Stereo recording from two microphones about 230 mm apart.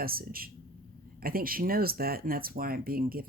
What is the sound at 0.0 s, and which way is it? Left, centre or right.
Speech, right.